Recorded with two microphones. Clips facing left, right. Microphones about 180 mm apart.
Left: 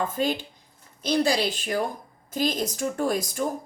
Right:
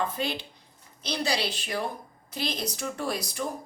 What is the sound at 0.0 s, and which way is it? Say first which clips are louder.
A woman's voice: left 4 dB; 45° left (ahead or behind).